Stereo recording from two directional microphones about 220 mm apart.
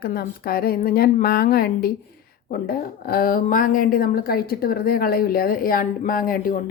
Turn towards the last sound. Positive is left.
turn(degrees=40)  # may be behind; listen again after turning